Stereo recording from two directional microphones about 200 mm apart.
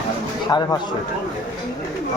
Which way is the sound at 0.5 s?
20° left (ahead or behind).